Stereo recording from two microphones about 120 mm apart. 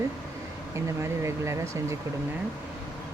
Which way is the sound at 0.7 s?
25° right (ahead or behind).